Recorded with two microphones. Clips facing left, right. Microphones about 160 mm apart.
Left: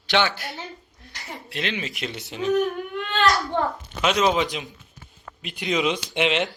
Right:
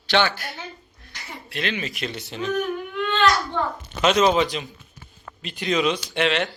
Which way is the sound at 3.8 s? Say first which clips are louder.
Right 5 dB; 5° left (ahead or behind).